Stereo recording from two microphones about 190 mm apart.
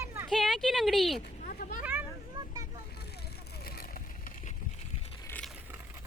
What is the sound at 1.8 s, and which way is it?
Vehicle, 15° right (ahead or behind).